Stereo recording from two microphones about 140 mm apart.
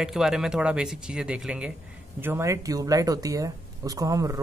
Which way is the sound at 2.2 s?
15° right (ahead or behind).